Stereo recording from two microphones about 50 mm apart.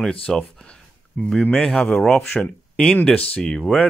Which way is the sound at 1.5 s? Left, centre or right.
Centre.